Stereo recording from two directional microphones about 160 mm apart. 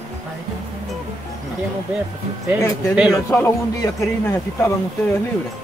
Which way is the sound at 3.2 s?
15° left (ahead or behind).